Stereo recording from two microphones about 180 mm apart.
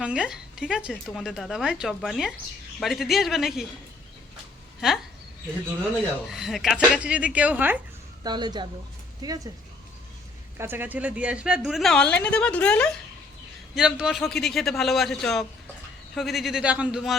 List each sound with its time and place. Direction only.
0.0 s speech: 5° right (ahead or behind)
6.2 s speech: centre (ahead or behind)
8.2 s a woman's voice: 25° right (ahead or behind)
10.6 s speech: 10° right (ahead or behind)